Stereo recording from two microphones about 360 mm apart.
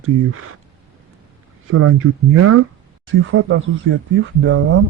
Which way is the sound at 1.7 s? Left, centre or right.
Right.